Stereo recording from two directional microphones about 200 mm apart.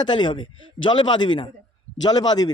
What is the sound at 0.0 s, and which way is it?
A man's voice, 20° left (ahead or behind).